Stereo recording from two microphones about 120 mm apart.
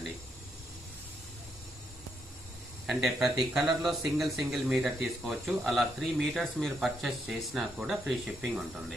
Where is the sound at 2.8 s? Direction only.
5° right (ahead or behind).